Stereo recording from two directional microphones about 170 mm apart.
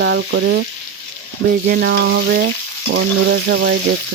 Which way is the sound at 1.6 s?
70° right (ahead or behind).